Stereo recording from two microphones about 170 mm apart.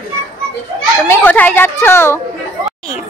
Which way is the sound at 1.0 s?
10° left (ahead or behind).